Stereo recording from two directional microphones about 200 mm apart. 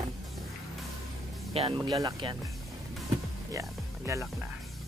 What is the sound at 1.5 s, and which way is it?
Speech, 25° right (ahead or behind).